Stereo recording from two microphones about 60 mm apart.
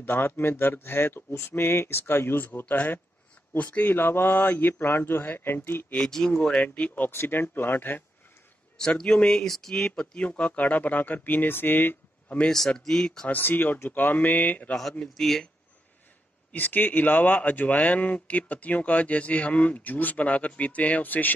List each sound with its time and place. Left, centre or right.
0.0 s a man's voice: left
5.9 s speech: centre
6.6 s speech: left
7.1 s a man's voice: left
8.7 s speech: centre; by 12.4 s left
12.4 s speech: centre
13.3 s a man's voice: left
15.1 s speech: centre
16.5 s speech: left